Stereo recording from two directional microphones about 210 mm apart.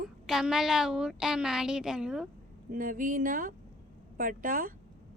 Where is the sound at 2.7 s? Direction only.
40° right (ahead or behind).